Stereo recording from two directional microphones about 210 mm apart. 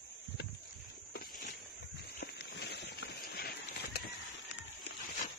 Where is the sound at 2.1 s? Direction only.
50° left (ahead or behind).